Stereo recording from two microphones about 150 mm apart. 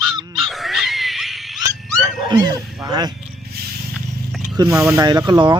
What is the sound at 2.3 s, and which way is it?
Speech, 25° right (ahead or behind).